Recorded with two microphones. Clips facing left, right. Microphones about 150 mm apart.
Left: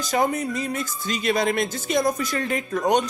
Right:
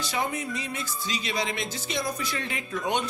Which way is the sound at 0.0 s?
45° left (ahead or behind).